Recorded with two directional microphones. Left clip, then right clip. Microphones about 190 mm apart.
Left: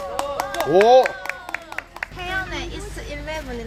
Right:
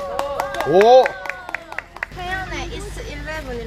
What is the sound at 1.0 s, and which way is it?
Clapping, 60° left (ahead or behind).